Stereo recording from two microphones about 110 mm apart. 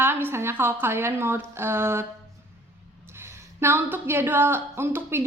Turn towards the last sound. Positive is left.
turn(degrees=-20)  # may be behind; listen again after turning